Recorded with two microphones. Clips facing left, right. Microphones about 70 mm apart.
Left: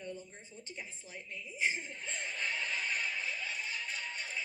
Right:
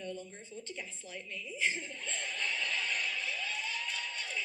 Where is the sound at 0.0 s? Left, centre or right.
Centre.